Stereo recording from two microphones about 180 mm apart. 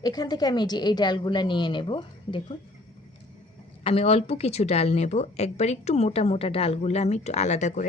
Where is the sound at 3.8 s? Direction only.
35° left (ahead or behind).